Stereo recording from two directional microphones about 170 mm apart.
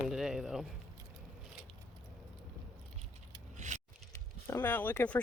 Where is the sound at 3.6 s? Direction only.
45° right (ahead or behind).